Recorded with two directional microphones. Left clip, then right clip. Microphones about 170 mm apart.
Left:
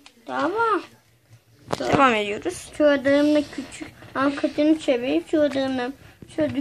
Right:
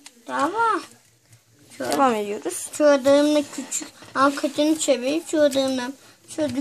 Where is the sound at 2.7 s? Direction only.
40° right (ahead or behind).